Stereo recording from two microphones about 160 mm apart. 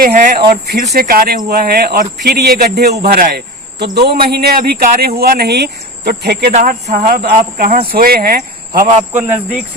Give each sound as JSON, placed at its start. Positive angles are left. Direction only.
{"t": 0.0, "sound": "speech", "side_deg": -75}
{"t": 3.0, "sound": "speech", "side_deg": -65}
{"t": 6.5, "sound": "speech", "side_deg": -50}
{"t": 9.1, "sound": "speech", "side_deg": -10}